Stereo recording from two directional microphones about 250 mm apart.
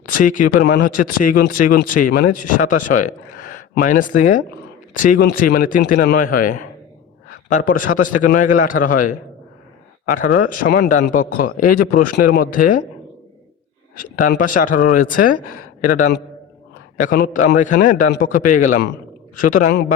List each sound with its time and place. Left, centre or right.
0.1 s speech: left
13.9 s speech: left